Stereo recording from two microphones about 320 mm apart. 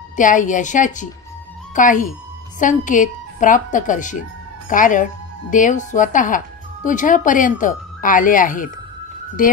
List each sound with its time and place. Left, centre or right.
0.1 s speech: left